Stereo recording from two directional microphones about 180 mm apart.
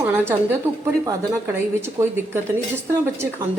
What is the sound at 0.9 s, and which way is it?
Speech, 15° right (ahead or behind).